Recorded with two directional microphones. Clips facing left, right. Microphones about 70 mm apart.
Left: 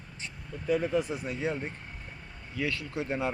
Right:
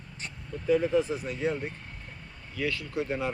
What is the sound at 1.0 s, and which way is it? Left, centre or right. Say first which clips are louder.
Speech: right 2 dB; centre.